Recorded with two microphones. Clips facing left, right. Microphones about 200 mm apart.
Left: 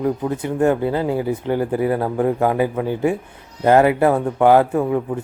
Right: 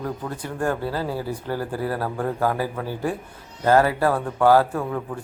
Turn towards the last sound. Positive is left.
turn(degrees=20)  # may be behind; listen again after turning